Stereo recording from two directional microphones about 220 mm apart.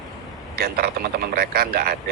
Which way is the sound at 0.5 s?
45° right (ahead or behind).